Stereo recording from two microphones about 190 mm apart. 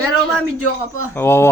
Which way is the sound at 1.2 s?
10° left (ahead or behind).